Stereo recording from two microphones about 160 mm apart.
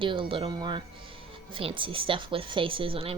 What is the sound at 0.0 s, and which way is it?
Speech, 30° right (ahead or behind).